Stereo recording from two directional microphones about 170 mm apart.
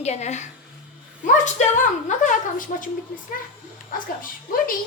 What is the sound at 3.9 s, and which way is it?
Speech, 55° left (ahead or behind).